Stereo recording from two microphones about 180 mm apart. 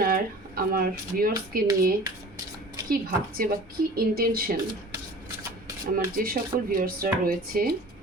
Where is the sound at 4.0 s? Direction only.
55° right (ahead or behind).